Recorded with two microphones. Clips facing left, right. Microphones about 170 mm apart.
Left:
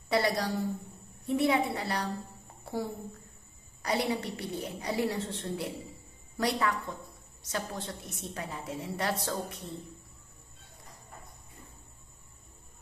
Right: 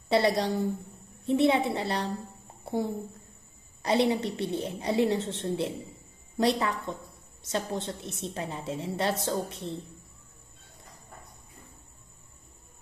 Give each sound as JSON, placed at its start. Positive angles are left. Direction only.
{"t": 0.1, "sound": "a woman's voice", "side_deg": -25}